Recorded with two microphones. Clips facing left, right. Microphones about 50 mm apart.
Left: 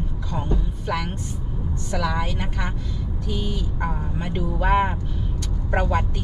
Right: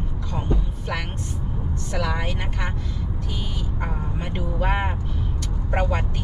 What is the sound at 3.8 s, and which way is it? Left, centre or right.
Speech, centre.